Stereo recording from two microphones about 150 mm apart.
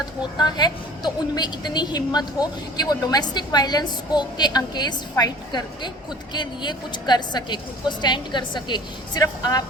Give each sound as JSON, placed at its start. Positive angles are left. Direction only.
{"t": 0.3, "sound": "a woman's voice", "side_deg": 30}